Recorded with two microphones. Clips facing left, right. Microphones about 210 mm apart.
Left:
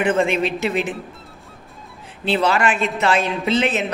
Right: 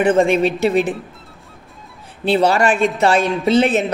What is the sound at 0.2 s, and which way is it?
Speech, 45° right (ahead or behind).